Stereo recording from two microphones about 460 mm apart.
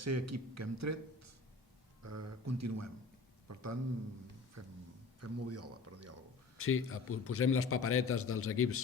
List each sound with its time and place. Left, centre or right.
0.0 s a man's voice: right
6.6 s a man's voice: left